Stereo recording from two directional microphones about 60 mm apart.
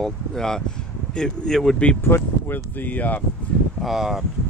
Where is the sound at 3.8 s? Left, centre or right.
Centre.